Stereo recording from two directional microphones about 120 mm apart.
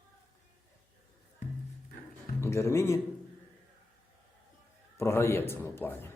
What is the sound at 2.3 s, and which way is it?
Speech, 20° left (ahead or behind).